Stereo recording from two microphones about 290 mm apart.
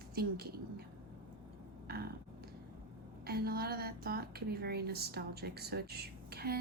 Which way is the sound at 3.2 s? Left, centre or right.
Right.